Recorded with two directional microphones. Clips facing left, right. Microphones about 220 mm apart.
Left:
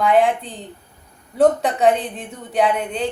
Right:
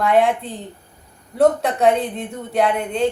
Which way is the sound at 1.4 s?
Centre (ahead or behind).